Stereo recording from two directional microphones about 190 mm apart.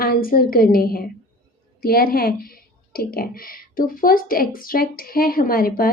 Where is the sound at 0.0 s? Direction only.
50° left (ahead or behind).